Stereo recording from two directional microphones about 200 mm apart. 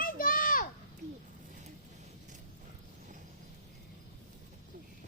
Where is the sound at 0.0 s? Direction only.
45° left (ahead or behind).